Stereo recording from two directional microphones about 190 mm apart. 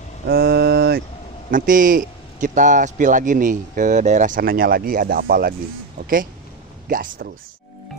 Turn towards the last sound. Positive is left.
turn(degrees=-50)  # may be behind; listen again after turning